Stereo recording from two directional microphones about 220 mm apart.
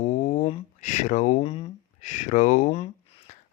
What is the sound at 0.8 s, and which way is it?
Speech, 35° left (ahead or behind).